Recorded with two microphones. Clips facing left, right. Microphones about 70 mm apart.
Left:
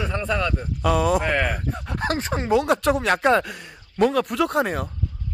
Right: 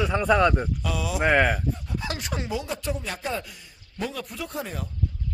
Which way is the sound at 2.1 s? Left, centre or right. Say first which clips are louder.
Left 6 dB; left.